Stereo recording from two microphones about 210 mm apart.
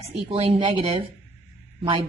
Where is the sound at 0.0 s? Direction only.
30° right (ahead or behind).